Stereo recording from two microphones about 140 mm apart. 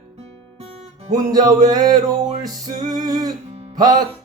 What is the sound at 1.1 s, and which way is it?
Music, 25° right (ahead or behind).